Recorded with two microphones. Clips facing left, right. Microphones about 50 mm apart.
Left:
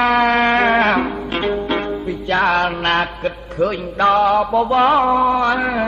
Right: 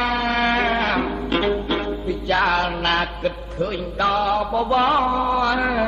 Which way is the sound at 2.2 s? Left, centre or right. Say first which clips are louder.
Left 3 dB; left.